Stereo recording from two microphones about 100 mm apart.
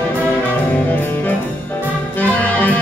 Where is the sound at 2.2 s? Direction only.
15° left (ahead or behind).